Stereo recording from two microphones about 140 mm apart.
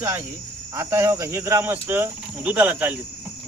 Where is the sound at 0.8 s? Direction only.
20° right (ahead or behind).